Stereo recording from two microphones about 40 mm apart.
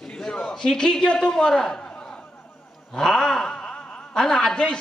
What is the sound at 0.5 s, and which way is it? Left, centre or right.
Speech, centre.